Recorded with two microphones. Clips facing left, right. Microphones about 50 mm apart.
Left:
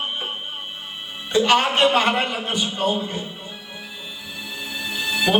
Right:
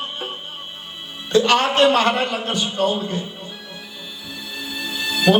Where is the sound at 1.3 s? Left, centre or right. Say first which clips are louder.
Right 1 dB; centre.